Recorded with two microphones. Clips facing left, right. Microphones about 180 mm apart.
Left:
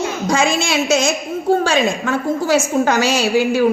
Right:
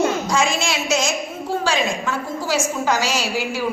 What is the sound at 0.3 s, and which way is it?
A woman's voice, 60° left (ahead or behind).